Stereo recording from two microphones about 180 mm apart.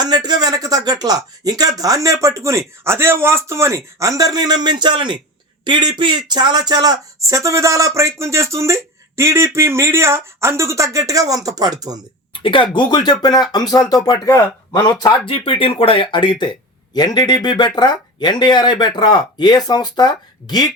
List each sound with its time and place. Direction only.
0.0 s speech: 20° right (ahead or behind)
12.3 s a sound: 30° left (ahead or behind)
12.7 s speech: 25° left (ahead or behind)